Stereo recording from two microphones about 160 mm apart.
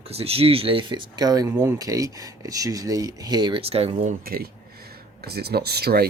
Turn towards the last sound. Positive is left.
turn(degrees=-85)